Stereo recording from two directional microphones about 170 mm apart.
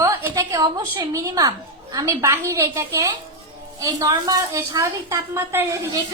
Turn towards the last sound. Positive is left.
turn(degrees=-15)  # may be behind; listen again after turning